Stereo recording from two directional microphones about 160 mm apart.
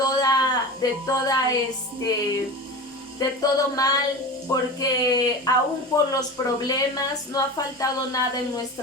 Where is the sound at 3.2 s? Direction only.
25° left (ahead or behind).